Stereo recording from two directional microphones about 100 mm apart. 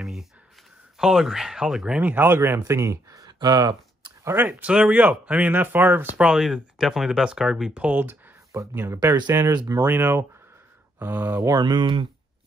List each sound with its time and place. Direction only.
0.0 s a sound: 5° right (ahead or behind)
0.9 s speech: 5° right (ahead or behind)
2.0 s speech: 15° right (ahead or behind); by 4.1 s 45° right (ahead or behind)
4.2 s speech: 20° right (ahead or behind)
6.2 s speech: 5° right (ahead or behind)
8.5 s speech: 25° right (ahead or behind)
9.5 s speech: 40° right (ahead or behind)
9.8 s speech: 20° right (ahead or behind)
11.4 s speech: 45° right (ahead or behind)